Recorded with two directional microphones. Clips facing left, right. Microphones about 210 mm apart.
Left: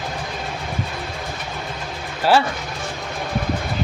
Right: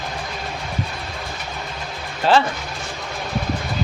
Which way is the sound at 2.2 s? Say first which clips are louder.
Even; 10° left (ahead or behind).